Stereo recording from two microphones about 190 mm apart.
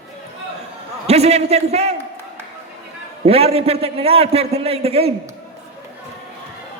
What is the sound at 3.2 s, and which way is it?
A man's voice, 30° right (ahead or behind).